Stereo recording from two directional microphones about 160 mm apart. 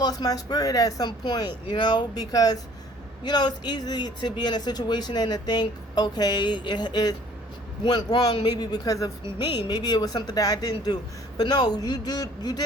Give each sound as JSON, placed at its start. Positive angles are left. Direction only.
{"t": 0.0, "sound": "speech", "side_deg": 25}